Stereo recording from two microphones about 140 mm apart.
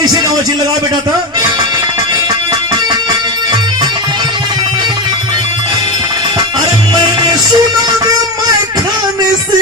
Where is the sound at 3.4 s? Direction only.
30° right (ahead or behind).